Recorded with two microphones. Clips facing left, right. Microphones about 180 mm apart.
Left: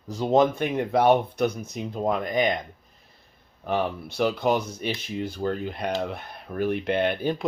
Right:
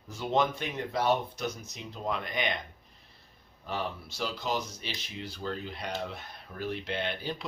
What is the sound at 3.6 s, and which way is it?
Speech, 60° left (ahead or behind).